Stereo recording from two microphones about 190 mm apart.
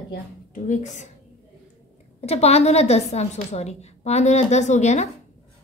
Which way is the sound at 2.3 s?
35° left (ahead or behind).